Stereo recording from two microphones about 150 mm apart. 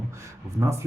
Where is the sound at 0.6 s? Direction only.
20° right (ahead or behind).